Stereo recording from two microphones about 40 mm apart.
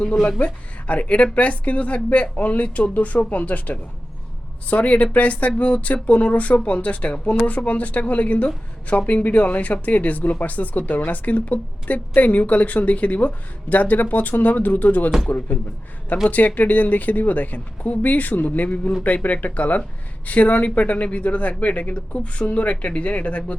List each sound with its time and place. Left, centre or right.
0.3 s speech: left
16.1 s speech: left